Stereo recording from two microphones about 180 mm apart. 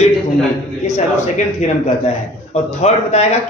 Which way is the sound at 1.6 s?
40° left (ahead or behind).